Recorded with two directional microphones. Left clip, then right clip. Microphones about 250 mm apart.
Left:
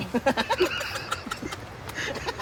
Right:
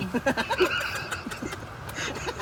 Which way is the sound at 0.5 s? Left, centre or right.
Centre.